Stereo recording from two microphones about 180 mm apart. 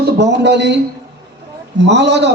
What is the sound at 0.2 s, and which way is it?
Speech, 70° right (ahead or behind).